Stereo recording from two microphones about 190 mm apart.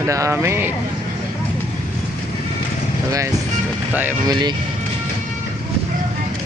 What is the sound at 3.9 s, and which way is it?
Speech, 10° right (ahead or behind).